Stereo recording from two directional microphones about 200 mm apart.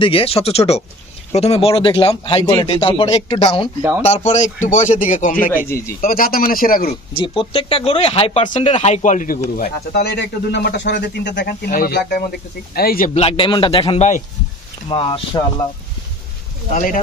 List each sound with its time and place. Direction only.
0.0 s a man's voice: 30° left (ahead or behind); by 7.0 s 45° left (ahead or behind)
7.2 s speech: 25° left (ahead or behind); by 13.1 s 45° left (ahead or behind)
13.1 s speech: 30° left (ahead or behind)
16.7 s a man's voice: 40° left (ahead or behind)